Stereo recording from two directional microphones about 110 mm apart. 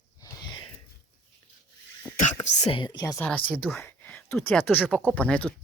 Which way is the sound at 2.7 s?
45° left (ahead or behind).